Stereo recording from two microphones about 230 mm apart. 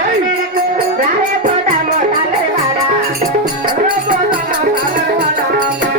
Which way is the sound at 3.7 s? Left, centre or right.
Right.